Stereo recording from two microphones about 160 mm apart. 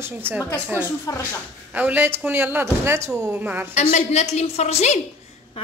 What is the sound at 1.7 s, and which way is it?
Speech, 10° right (ahead or behind).